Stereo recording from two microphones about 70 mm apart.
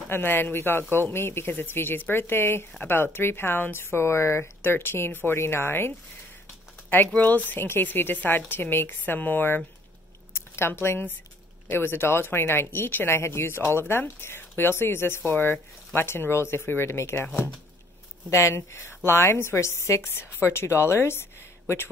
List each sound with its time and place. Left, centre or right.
0.1 s speech: left
7.2 s a woman's voice: left
10.3 s a sound: left
10.7 s a woman's voice: left
18.3 s speech: left